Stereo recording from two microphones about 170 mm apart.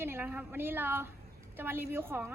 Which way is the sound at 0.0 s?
10° right (ahead or behind).